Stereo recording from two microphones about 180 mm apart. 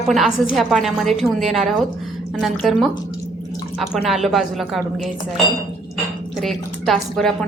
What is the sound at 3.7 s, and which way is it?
A woman's voice, centre (ahead or behind).